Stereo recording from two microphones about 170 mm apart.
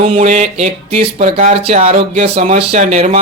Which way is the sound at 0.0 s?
45° right (ahead or behind).